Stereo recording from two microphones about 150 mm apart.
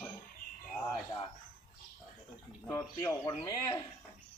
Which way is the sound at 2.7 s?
20° left (ahead or behind).